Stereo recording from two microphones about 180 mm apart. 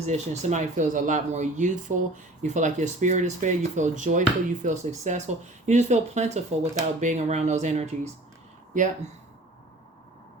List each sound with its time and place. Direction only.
0.0 s speech: 40° right (ahead or behind)